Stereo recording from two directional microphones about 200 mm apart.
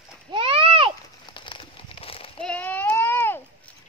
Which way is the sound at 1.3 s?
25° left (ahead or behind).